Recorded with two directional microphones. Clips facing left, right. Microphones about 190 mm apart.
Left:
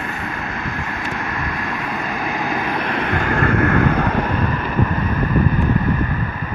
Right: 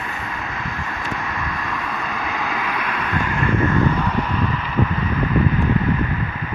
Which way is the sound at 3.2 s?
65° left (ahead or behind).